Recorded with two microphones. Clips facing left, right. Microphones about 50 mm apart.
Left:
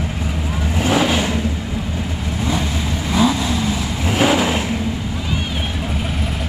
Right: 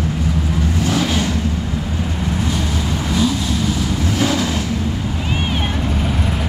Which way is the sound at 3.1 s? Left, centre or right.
Left.